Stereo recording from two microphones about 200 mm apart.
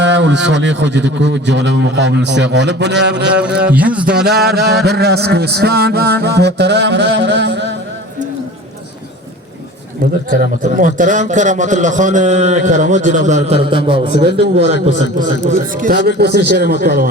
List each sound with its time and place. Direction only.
0.0 s a man's voice: 65° right (ahead or behind)
3.6 s speech: 5° right (ahead or behind)
4.1 s a man's voice: 50° right (ahead or behind)
10.2 s a man's voice: 45° right (ahead or behind); by 14.2 s 25° right (ahead or behind)
15.4 s a man's voice: 45° right (ahead or behind)
16.0 s a man's voice: 55° right (ahead or behind)